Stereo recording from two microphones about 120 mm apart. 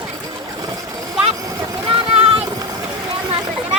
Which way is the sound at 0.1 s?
30° right (ahead or behind).